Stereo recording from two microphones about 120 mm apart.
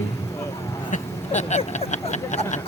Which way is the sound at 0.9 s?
70° left (ahead or behind).